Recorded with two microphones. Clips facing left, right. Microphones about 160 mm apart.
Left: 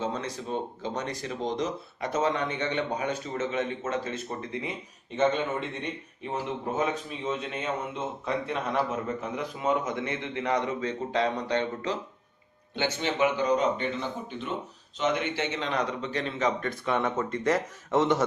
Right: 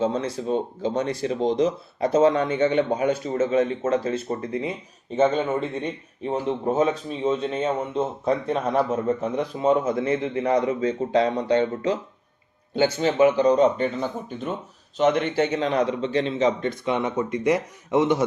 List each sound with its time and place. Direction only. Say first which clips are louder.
0.0 s a man's voice: right 8 dB; 30° right (ahead or behind); by 18.2 s 15° right (ahead or behind)